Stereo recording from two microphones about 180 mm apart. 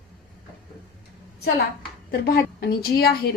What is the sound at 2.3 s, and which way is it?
Speech, 65° left (ahead or behind).